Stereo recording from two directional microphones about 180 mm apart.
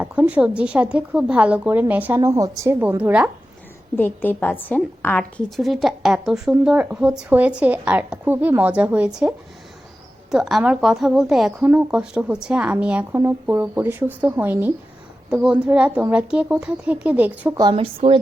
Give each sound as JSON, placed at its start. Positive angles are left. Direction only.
{"t": 0.0, "sound": "speech", "side_deg": -10}
{"t": 3.9, "sound": "a woman's voice", "side_deg": 10}
{"t": 10.3, "sound": "a woman's voice", "side_deg": 0}
{"t": 17.6, "sound": "a woman's voice", "side_deg": -30}